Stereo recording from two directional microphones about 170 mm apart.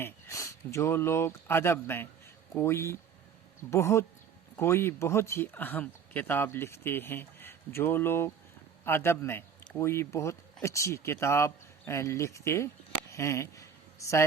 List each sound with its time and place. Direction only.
0.0 s a man's voice: 15° left (ahead or behind)